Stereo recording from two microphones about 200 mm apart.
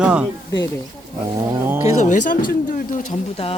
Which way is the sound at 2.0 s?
40° left (ahead or behind).